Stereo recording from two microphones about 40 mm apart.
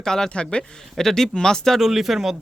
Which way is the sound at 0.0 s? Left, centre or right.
Centre.